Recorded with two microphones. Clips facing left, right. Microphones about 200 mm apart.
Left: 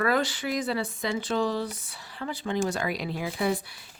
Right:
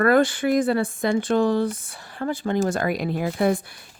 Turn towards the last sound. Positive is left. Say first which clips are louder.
# right 6 dB
turn(degrees=-50)  # may be behind; listen again after turning